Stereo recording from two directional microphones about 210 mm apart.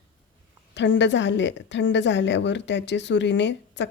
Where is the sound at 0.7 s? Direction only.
60° left (ahead or behind).